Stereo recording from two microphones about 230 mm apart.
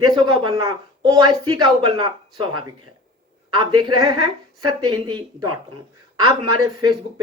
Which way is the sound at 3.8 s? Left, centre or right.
Centre.